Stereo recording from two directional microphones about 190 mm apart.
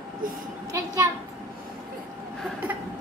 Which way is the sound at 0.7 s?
20° right (ahead or behind).